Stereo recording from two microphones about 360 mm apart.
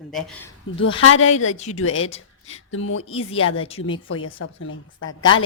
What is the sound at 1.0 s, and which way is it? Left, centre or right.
Speech, left.